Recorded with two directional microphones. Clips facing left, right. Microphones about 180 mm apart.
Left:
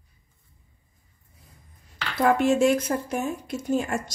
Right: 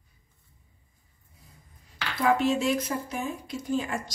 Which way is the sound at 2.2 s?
50° left (ahead or behind).